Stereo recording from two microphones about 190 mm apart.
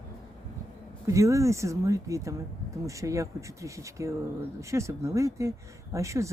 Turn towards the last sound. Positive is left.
turn(degrees=-15)  # may be behind; listen again after turning